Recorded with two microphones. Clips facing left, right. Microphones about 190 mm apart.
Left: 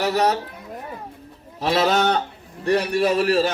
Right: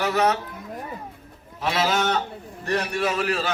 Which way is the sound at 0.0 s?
35° left (ahead or behind).